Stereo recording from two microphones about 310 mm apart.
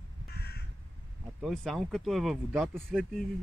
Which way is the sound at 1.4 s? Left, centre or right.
Centre.